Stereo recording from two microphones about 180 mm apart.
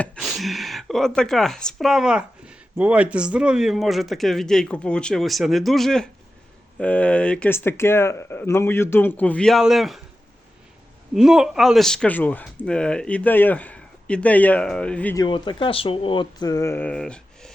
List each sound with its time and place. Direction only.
0.0 s speech: centre (ahead or behind)
11.1 s speech: centre (ahead or behind)
15.1 s speech: 25° left (ahead or behind); by 17.5 s 5° left (ahead or behind)